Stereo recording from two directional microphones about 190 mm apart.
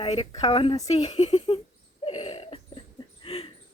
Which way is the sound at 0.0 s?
30° left (ahead or behind).